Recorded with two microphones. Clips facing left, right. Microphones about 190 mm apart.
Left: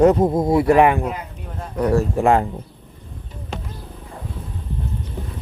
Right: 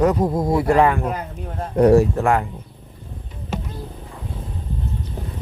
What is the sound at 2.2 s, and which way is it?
Speech, 15° left (ahead or behind).